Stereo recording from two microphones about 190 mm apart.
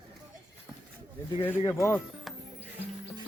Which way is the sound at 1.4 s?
15° left (ahead or behind).